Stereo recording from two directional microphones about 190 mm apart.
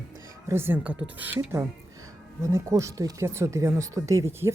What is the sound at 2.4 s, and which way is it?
Speech, 15° right (ahead or behind).